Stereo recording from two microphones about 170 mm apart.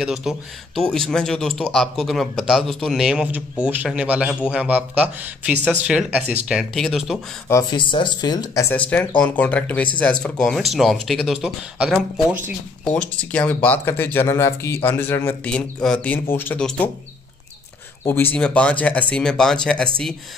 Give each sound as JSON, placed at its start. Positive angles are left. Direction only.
{"t": 0.0, "sound": "a man's voice", "side_deg": 0}
{"t": 7.7, "sound": "speech", "side_deg": 30}
{"t": 8.7, "sound": "a man's voice", "side_deg": 10}
{"t": 12.8, "sound": "speech", "side_deg": 10}
{"t": 18.0, "sound": "speech", "side_deg": 10}